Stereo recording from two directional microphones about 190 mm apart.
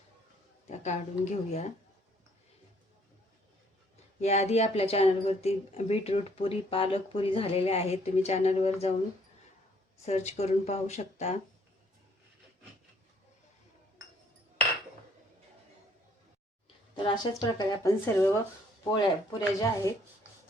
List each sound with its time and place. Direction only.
0.8 s speech: 40° left (ahead or behind)
4.2 s speech: 35° left (ahead or behind)
10.1 s speech: 35° left (ahead or behind)
16.9 s speech: 25° left (ahead or behind)